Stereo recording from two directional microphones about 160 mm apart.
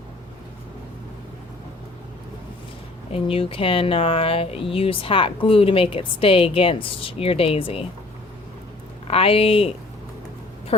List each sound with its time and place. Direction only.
3.1 s speech: 35° left (ahead or behind)
9.0 s speech: 35° left (ahead or behind)